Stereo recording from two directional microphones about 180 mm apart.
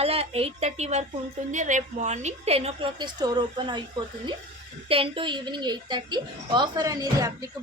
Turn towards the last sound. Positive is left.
turn(degrees=-20)  # may be behind; listen again after turning